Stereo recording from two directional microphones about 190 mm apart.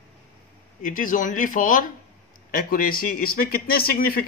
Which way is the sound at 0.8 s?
45° left (ahead or behind).